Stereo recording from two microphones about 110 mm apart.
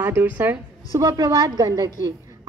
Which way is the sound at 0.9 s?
35° right (ahead or behind).